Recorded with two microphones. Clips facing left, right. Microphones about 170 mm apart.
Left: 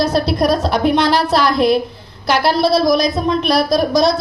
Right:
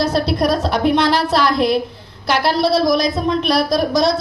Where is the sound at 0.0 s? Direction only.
40° left (ahead or behind).